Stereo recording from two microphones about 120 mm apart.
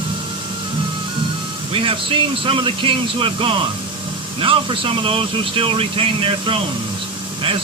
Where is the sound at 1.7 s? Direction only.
45° right (ahead or behind).